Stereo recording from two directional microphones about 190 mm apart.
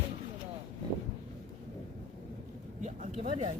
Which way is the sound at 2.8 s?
40° right (ahead or behind).